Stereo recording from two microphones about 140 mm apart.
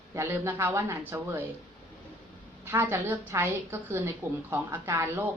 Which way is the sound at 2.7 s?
15° right (ahead or behind).